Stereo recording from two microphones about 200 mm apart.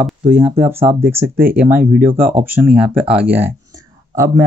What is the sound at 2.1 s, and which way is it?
Speech, 45° right (ahead or behind).